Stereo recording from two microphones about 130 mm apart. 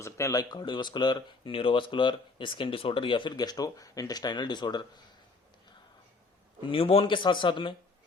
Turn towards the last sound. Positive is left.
turn(degrees=40)  # may be behind; listen again after turning